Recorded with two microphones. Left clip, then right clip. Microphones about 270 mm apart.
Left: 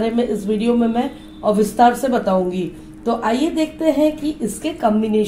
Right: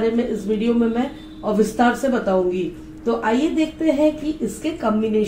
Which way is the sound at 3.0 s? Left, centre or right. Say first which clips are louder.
Left 1 dB; left.